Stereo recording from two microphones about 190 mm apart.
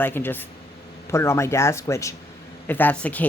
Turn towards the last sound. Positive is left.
turn(degrees=10)  # may be behind; listen again after turning